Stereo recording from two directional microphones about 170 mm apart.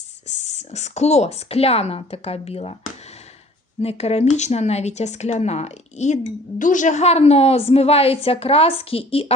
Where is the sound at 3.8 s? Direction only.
35° left (ahead or behind).